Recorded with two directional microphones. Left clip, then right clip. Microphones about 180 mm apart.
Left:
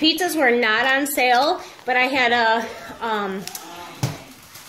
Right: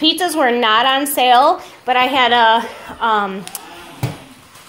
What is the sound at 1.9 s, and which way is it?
A woman's voice, 5° left (ahead or behind).